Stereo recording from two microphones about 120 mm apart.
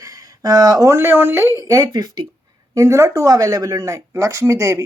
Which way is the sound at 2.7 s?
25° right (ahead or behind).